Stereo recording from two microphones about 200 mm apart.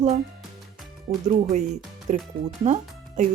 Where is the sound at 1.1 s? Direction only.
30° right (ahead or behind).